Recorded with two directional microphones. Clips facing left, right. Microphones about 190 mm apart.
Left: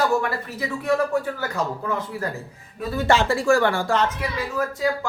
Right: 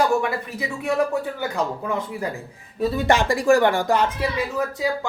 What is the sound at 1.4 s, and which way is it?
Speech, 15° right (ahead or behind).